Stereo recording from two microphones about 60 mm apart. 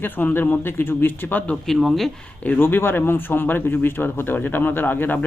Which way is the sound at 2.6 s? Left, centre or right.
Left.